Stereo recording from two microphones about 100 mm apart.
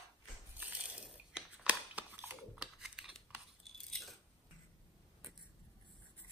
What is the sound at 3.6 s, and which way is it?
Chewing, 5° left (ahead or behind).